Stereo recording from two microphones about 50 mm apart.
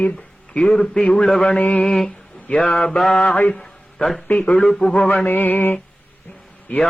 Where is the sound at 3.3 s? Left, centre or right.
Left.